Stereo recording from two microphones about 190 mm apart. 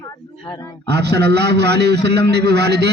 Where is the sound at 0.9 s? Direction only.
60° right (ahead or behind).